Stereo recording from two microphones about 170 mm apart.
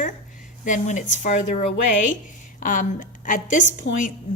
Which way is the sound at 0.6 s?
45° left (ahead or behind).